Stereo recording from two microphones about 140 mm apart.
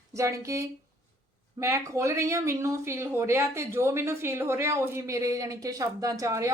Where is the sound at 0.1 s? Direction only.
20° right (ahead or behind).